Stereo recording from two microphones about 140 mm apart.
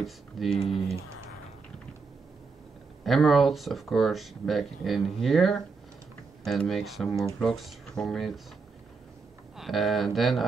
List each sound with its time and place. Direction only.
0.0 s speech: centre (ahead or behind)
0.6 s speech: 40° left (ahead or behind)
3.0 s speech: centre (ahead or behind)
9.6 s speech: centre (ahead or behind)